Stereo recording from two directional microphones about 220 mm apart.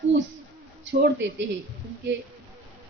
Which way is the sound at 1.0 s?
55° right (ahead or behind).